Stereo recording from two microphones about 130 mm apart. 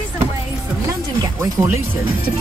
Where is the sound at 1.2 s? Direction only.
25° right (ahead or behind).